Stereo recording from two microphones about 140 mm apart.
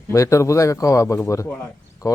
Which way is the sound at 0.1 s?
20° left (ahead or behind).